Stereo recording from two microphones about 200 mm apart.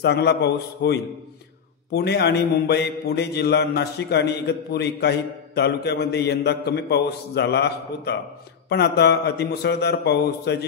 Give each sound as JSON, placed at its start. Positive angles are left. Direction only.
{"t": 0.0, "sound": "a man's voice", "side_deg": 55}